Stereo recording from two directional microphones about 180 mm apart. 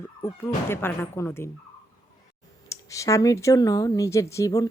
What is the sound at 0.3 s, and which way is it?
Speech, 10° left (ahead or behind).